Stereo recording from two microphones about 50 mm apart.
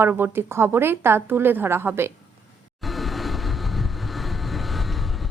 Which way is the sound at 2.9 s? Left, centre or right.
Centre.